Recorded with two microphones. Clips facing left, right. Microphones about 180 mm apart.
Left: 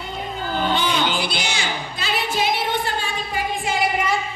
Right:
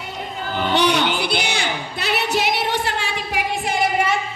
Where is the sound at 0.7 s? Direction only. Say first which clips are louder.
Right 3 dB; 70° right (ahead or behind).